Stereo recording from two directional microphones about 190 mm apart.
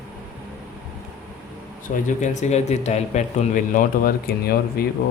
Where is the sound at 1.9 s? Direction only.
40° left (ahead or behind).